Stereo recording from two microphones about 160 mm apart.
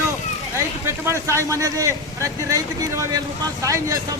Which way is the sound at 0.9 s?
15° right (ahead or behind).